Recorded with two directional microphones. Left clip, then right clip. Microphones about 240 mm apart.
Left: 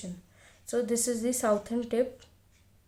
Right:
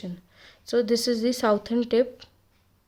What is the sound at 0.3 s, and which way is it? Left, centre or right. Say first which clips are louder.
Speech: right 6 dB; right.